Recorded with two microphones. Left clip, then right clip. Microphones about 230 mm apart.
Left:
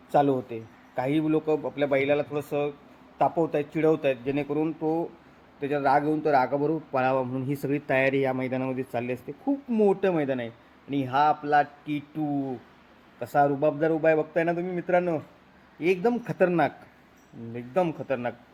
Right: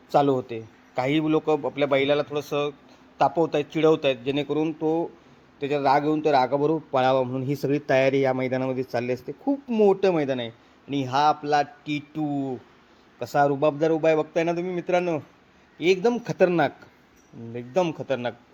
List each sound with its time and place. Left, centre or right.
0.1 s a man's voice: right